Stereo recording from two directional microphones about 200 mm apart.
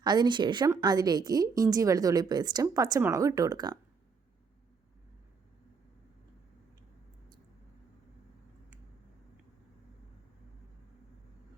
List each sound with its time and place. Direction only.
0.0 s a woman's voice: 20° right (ahead or behind)